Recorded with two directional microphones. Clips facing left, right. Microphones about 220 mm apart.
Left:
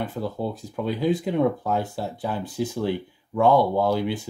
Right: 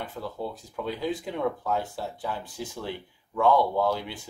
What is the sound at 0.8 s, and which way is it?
Speech, 15° left (ahead or behind).